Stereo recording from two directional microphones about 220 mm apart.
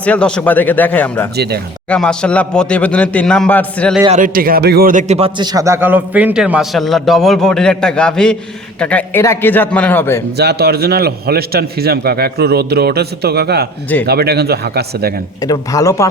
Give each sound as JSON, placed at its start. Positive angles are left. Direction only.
{"t": 0.0, "sound": "a man's voice", "side_deg": 5}
{"t": 1.4, "sound": "a man's voice", "side_deg": -45}
{"t": 1.9, "sound": "a man's voice", "side_deg": 5}
{"t": 4.1, "sound": "a man's voice", "side_deg": -40}
{"t": 10.3, "sound": "a man's voice", "side_deg": -50}
{"t": 15.4, "sound": "a man's voice", "side_deg": 15}